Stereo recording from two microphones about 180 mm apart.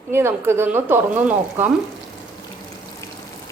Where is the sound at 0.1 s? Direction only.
15° right (ahead or behind).